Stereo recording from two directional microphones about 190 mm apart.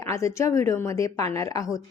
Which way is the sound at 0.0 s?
15° left (ahead or behind).